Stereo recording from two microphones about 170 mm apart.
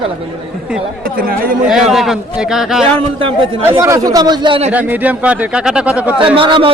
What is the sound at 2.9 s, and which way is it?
Speech, 30° right (ahead or behind).